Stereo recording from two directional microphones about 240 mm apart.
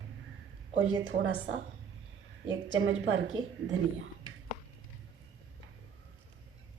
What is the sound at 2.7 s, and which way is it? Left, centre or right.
Speech, right.